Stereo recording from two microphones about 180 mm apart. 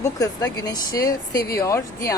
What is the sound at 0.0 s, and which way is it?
Speech, 20° left (ahead or behind).